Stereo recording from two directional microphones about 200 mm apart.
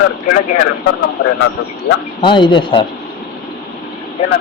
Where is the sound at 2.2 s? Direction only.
25° left (ahead or behind).